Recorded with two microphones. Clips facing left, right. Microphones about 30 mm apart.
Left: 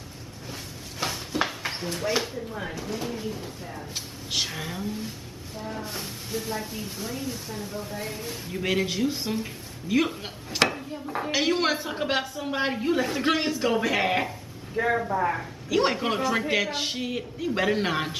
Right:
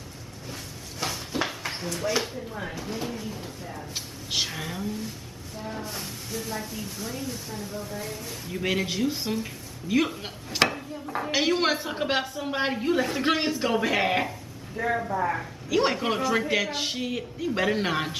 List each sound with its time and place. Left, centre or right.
0.5 s a sound: centre
2.1 s a man's voice: centre
7.9 s speech: left
8.3 s a man's voice: centre
14.8 s a man's voice: centre